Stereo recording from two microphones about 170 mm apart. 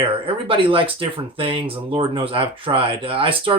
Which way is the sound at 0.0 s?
30° right (ahead or behind).